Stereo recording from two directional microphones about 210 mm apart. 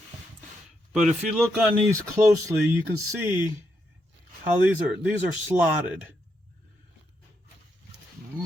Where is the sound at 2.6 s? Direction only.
10° right (ahead or behind).